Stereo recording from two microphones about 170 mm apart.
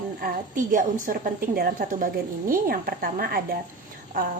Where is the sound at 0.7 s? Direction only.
55° right (ahead or behind).